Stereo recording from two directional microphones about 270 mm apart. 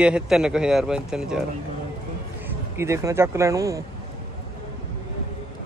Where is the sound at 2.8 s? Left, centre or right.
Centre.